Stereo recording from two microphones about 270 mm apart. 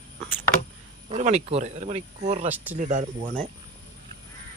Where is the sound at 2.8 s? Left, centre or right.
Right.